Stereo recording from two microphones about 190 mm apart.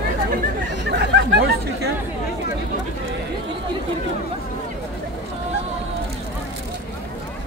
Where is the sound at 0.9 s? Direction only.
65° right (ahead or behind).